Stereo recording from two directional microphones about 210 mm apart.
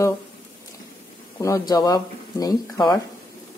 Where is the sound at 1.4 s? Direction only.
15° left (ahead or behind).